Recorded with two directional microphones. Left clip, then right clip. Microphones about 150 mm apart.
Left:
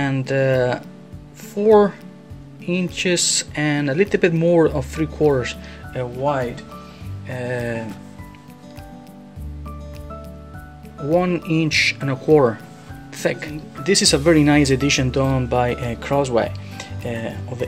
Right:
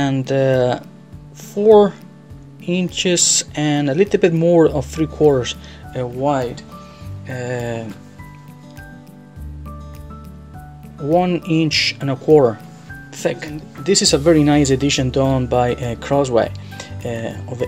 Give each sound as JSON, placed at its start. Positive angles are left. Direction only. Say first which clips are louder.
{"t": 0.0, "sound": "speech", "louder": "right 3 dB", "side_deg": -20}
{"t": 5.9, "sound": "speech", "louder": "right 2 dB", "side_deg": -45}
{"t": 7.2, "sound": "speech", "louder": "right 1 dB", "side_deg": -35}
{"t": 11.1, "sound": "speech", "louder": "right 3 dB", "side_deg": -20}